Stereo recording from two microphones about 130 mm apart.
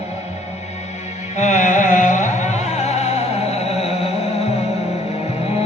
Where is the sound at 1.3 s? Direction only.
65° left (ahead or behind).